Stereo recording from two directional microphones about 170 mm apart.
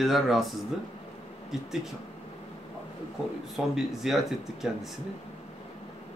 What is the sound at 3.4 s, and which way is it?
A man's voice, centre (ahead or behind).